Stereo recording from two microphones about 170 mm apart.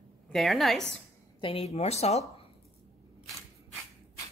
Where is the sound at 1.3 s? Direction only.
30° left (ahead or behind).